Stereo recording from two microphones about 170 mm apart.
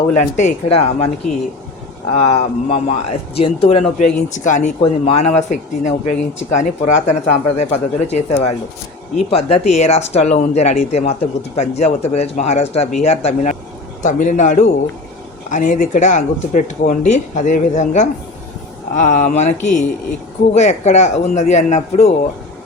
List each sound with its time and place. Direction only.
0.1 s speech: 45° left (ahead or behind)
2.1 s speech: 40° left (ahead or behind)
4.8 s speech: 35° left (ahead or behind)
9.1 s speech: 40° left (ahead or behind)